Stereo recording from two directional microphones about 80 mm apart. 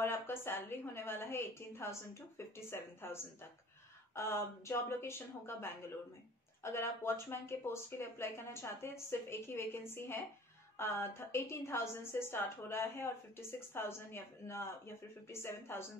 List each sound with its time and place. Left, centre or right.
0.0 s a woman's voice: left